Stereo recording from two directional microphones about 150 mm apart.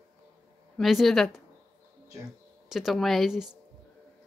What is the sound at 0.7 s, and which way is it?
Speech, centre (ahead or behind).